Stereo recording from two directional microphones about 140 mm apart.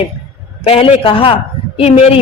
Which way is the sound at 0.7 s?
40° left (ahead or behind).